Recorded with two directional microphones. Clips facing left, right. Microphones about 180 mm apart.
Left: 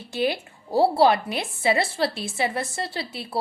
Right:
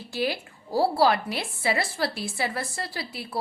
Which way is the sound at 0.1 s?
20° left (ahead or behind).